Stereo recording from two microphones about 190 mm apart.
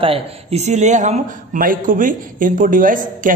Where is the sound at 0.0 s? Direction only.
30° right (ahead or behind).